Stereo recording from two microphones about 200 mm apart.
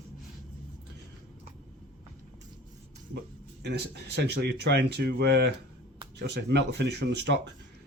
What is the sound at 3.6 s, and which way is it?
Speech, 60° right (ahead or behind).